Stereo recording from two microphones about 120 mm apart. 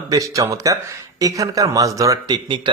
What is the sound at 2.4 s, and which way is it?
Speech, 40° right (ahead or behind).